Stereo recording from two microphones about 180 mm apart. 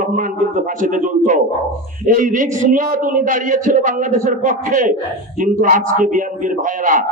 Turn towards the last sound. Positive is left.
turn(degrees=-45)  # may be behind; listen again after turning